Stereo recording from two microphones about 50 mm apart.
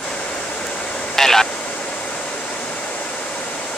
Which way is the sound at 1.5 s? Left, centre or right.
Left.